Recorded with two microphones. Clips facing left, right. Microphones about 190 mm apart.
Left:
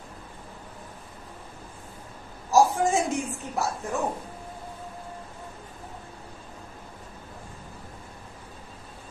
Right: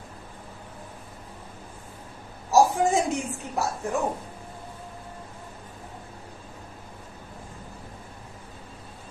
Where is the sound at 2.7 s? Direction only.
15° right (ahead or behind).